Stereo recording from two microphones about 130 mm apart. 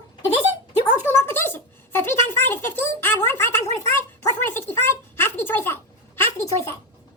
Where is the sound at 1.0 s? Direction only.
20° left (ahead or behind).